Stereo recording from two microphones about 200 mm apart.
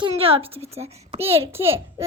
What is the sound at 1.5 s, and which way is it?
Speech, 10° right (ahead or behind).